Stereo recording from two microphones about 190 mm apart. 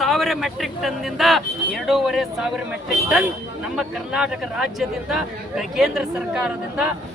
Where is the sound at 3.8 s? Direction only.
5° right (ahead or behind).